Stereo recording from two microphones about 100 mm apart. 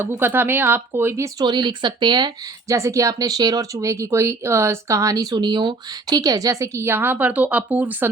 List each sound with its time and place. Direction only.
0.0 s speech: 20° right (ahead or behind)
1.5 s speech: 50° right (ahead or behind)
2.6 s speech: 30° right (ahead or behind)